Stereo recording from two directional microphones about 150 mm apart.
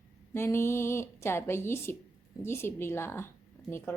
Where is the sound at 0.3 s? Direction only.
15° left (ahead or behind).